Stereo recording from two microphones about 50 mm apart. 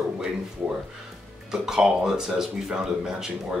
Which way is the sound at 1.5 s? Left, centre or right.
Centre.